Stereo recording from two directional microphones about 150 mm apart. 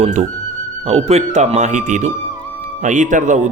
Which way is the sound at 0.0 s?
50° right (ahead or behind).